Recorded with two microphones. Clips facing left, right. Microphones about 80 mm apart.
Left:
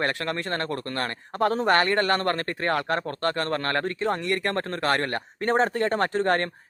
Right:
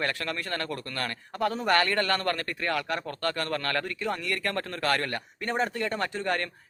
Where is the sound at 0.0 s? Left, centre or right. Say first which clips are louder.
Left 4 dB; left.